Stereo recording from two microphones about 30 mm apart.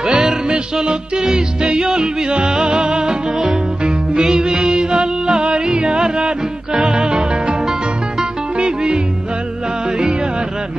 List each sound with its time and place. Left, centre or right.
0.0 s music: right
1.2 s music: right
8.5 s music: right